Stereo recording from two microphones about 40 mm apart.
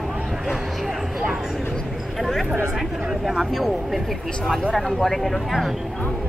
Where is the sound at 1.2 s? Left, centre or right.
Right.